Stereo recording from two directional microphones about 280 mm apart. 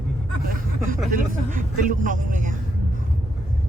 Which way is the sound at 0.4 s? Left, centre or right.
Right.